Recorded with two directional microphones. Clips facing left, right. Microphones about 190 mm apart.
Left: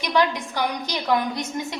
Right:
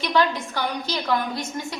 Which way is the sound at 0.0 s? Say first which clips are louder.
Even; 15° left (ahead or behind).